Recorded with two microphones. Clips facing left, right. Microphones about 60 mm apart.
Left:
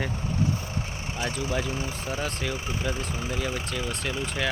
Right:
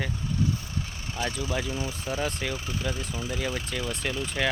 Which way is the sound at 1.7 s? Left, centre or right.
Left.